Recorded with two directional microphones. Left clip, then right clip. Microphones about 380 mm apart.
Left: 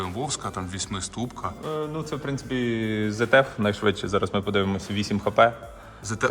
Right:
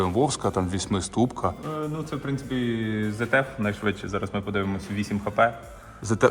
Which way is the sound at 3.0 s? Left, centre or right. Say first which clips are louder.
Left 5 dB; left.